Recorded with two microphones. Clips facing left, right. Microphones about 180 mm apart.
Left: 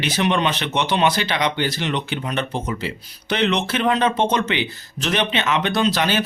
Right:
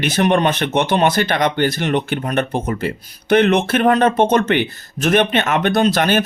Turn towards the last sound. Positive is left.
turn(degrees=-50)  # may be behind; listen again after turning